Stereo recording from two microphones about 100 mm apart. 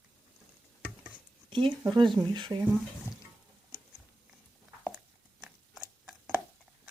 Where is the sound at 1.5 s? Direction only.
55° right (ahead or behind).